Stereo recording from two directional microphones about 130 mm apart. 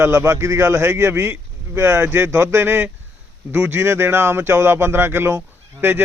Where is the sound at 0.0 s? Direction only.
20° right (ahead or behind).